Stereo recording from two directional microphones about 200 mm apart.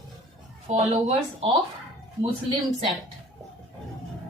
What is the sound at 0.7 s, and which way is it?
Speech, 35° right (ahead or behind).